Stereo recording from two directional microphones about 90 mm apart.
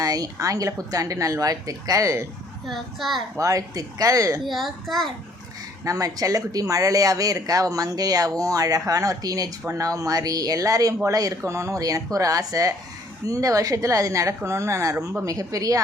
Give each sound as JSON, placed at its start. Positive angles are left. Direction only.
{"t": 0.0, "sound": "speech", "side_deg": -40}
{"t": 2.6, "sound": "a child's voice", "side_deg": 0}
{"t": 3.3, "sound": "speech", "side_deg": -40}
{"t": 4.4, "sound": "a child's voice", "side_deg": 0}
{"t": 5.8, "sound": "speech", "side_deg": -40}